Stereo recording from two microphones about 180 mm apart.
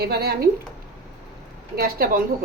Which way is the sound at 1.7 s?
55° right (ahead or behind).